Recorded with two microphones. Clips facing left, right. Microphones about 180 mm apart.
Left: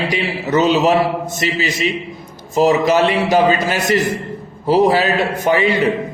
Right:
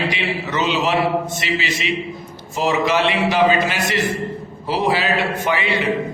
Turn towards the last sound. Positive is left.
turn(degrees=40)  # may be behind; listen again after turning